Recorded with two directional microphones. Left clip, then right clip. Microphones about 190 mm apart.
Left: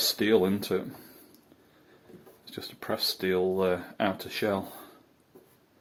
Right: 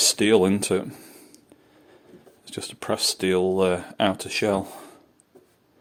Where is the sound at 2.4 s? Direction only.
45° right (ahead or behind).